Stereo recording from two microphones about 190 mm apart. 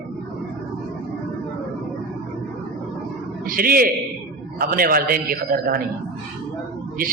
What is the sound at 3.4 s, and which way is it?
A man's voice, 50° right (ahead or behind).